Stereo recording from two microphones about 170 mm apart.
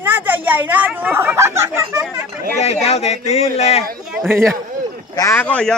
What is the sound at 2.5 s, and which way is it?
Speech, 40° left (ahead or behind).